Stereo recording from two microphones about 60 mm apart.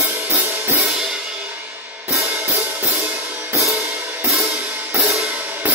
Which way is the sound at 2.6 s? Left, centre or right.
Right.